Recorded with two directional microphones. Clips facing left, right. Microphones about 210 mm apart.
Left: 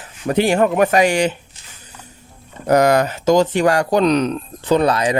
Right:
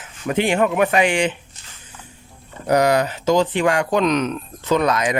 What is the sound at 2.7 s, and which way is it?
Speech, 45° left (ahead or behind).